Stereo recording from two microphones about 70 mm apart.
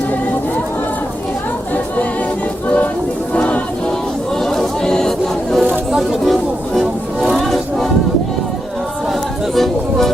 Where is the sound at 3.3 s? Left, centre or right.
Centre.